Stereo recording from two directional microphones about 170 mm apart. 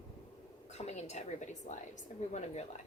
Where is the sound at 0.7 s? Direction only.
40° left (ahead or behind).